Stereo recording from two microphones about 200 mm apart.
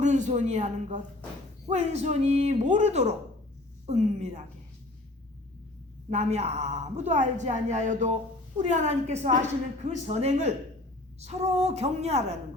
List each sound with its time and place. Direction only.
0.0 s a woman's voice: 35° right (ahead or behind)
6.1 s a woman's voice: 35° right (ahead or behind)